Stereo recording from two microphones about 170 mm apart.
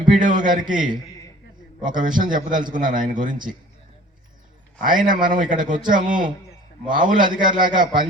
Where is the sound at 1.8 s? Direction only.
50° right (ahead or behind).